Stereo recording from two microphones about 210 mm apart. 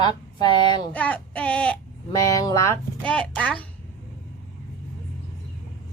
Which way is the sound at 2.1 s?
15° left (ahead or behind).